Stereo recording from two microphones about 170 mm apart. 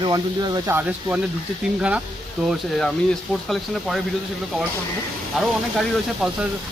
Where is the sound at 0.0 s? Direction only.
25° right (ahead or behind).